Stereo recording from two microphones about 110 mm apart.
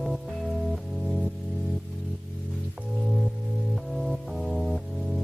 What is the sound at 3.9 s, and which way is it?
Music, centre (ahead or behind).